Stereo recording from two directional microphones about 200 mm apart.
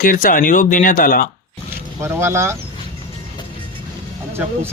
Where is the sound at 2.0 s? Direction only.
15° right (ahead or behind).